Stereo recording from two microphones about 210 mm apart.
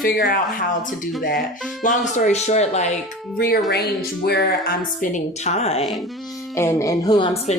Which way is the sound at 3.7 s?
50° left (ahead or behind).